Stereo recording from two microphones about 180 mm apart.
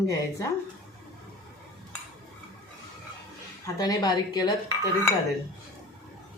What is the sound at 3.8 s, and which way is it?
Speech, 20° left (ahead or behind).